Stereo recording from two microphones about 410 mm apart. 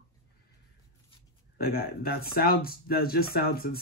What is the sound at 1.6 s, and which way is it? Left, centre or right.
Speech, left.